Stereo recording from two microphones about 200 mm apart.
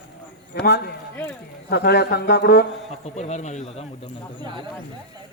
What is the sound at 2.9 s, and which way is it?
A man's voice, 35° left (ahead or behind).